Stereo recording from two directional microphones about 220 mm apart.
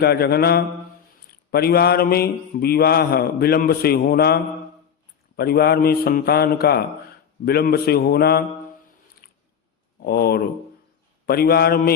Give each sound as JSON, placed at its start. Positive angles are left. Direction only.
{"t": 0.0, "sound": "mantra", "side_deg": 45}
{"t": 5.4, "sound": "mantra", "side_deg": 45}
{"t": 9.2, "sound": "chewing", "side_deg": 45}
{"t": 10.0, "sound": "mantra", "side_deg": 45}